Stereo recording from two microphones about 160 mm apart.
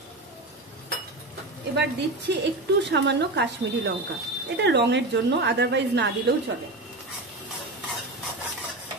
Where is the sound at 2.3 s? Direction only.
90° right.